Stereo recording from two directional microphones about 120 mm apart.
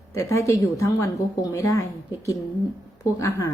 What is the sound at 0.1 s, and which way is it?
Speech, 25° left (ahead or behind).